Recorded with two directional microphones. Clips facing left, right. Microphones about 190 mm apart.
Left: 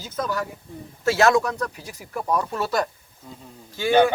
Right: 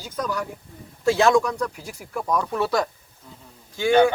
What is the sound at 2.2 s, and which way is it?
Speech, 10° left (ahead or behind).